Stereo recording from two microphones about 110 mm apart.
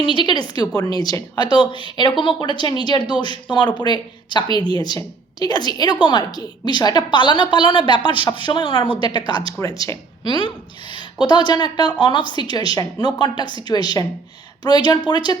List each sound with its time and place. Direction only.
0.0 s a woman's voice: 45° left (ahead or behind)
9.3 s speech: 55° right (ahead or behind)
9.6 s a woman's voice: 35° left (ahead or behind)
10.2 s a woman's voice: 45° left (ahead or behind)